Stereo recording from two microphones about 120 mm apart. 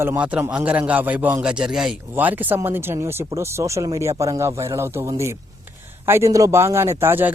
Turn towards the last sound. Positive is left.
turn(degrees=-20)  # may be behind; listen again after turning